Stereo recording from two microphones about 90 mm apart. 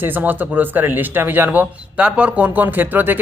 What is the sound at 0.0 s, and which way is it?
Speech, 20° right (ahead or behind).